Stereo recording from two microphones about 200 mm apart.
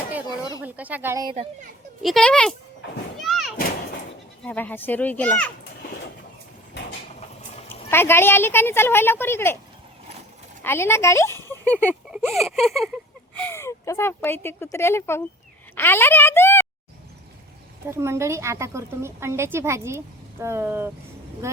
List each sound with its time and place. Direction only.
0.6 s speech: 10° right (ahead or behind)
2.0 s speech: centre (ahead or behind)
3.2 s a sound: centre (ahead or behind)
4.4 s speech: 10° left (ahead or behind)
7.9 s speech: 10° left (ahead or behind)
10.6 s speech: 10° left (ahead or behind)
15.7 s a sound: 10° left (ahead or behind)
17.8 s a woman's voice: 15° right (ahead or behind)